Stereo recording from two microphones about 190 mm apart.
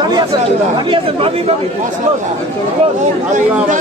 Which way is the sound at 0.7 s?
25° right (ahead or behind).